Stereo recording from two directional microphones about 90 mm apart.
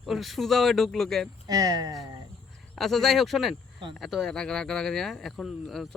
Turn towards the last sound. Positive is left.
turn(degrees=5)  # may be behind; listen again after turning